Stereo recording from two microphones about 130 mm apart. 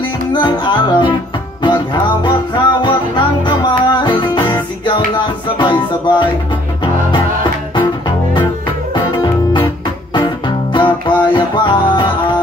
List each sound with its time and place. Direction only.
0.3 s music: 35° left (ahead or behind)
2.2 s music: 35° left (ahead or behind)
8.9 s music: 35° left (ahead or behind)